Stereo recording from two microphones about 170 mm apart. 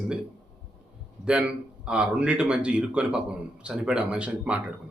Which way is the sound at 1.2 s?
5° right (ahead or behind).